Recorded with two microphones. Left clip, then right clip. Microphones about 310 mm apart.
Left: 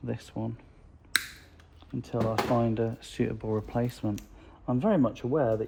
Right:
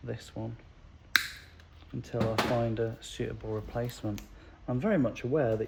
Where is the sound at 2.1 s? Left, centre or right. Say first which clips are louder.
Left 2 dB; left.